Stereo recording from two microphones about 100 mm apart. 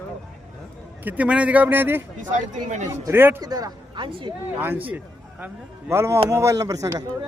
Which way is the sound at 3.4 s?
40° right (ahead or behind).